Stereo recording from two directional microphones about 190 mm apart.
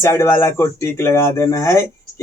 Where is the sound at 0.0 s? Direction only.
15° left (ahead or behind).